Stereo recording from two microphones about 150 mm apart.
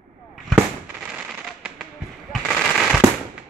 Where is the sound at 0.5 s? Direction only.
5° right (ahead or behind).